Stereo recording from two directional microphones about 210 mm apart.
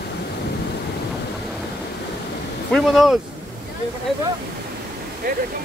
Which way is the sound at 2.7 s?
Centre (ahead or behind).